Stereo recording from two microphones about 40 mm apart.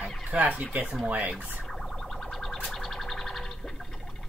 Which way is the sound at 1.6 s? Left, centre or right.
Centre.